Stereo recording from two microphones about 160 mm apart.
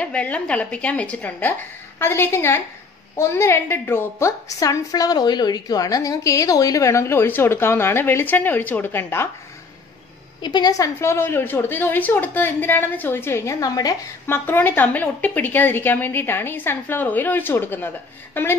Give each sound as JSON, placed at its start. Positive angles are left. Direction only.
{"t": 0.0, "sound": "a woman's voice", "side_deg": 10}
{"t": 10.4, "sound": "a woman's voice", "side_deg": 25}